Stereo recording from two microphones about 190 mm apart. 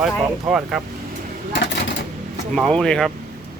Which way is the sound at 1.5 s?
70° left (ahead or behind).